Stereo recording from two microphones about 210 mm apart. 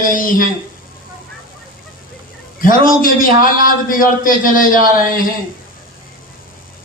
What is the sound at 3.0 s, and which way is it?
A man's voice, 40° left (ahead or behind).